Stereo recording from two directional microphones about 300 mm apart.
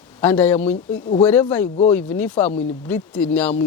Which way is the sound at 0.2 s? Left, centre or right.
Centre.